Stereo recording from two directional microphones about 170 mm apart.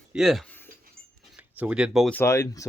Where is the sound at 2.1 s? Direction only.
15° left (ahead or behind).